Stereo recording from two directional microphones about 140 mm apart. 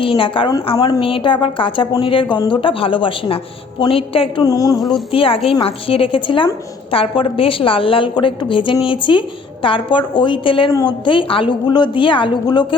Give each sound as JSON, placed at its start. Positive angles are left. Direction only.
{"t": 0.0, "sound": "a woman's voice", "side_deg": 40}
{"t": 4.4, "sound": "speech", "side_deg": 25}
{"t": 5.1, "sound": "a woman's voice", "side_deg": 40}